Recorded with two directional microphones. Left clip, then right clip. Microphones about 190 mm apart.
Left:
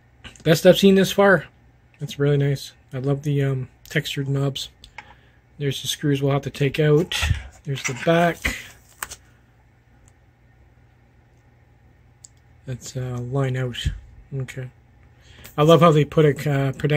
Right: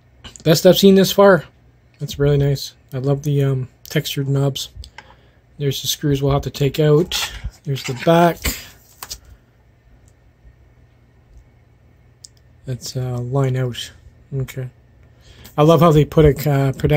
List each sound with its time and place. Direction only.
0.2 s speech: 15° right (ahead or behind)
12.6 s speech: 15° right (ahead or behind)